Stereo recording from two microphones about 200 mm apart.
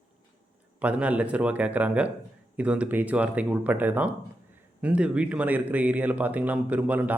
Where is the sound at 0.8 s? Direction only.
5° right (ahead or behind).